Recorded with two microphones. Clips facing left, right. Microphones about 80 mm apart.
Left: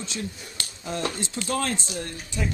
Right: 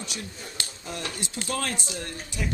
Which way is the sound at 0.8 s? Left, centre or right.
Left.